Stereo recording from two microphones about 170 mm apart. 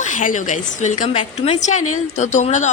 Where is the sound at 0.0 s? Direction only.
50° left (ahead or behind).